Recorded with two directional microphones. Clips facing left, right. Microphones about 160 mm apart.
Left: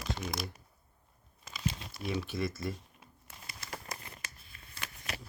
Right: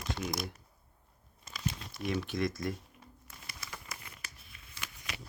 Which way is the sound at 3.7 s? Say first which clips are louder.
Left 6 dB; 35° left (ahead or behind).